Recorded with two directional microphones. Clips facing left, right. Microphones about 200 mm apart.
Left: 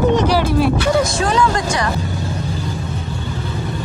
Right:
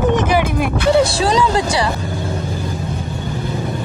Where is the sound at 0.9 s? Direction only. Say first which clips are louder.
Right 2 dB; 30° right (ahead or behind).